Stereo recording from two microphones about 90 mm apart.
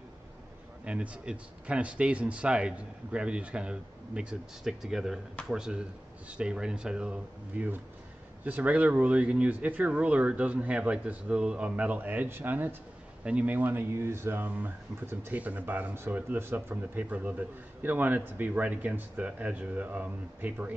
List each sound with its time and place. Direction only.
0.8 s speech: 15° right (ahead or behind)